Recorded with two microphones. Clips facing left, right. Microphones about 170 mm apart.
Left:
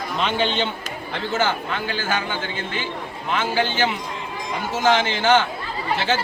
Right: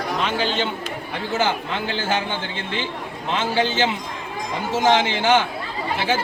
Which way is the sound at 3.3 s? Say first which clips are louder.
Right 1 dB; 20° right (ahead or behind).